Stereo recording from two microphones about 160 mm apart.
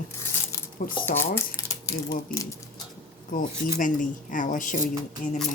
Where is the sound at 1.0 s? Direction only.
15° left (ahead or behind).